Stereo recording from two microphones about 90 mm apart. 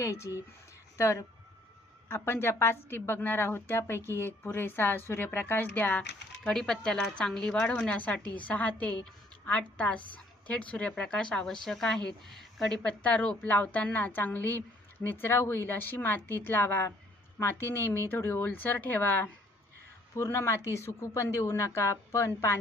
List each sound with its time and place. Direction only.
0.0 s a woman's voice: 35° left (ahead or behind)
6.0 s a woman's voice: 5° left (ahead or behind); by 22.5 s 30° left (ahead or behind)